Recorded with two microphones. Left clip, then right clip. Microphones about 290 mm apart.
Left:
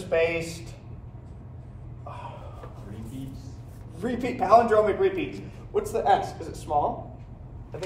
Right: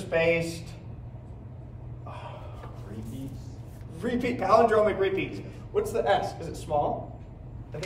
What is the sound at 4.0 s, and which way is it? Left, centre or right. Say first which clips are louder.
A man's voice: left 1 dB; centre.